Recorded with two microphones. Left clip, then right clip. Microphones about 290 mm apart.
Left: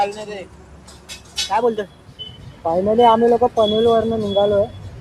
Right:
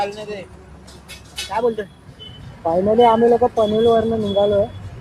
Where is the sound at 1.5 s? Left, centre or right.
Left.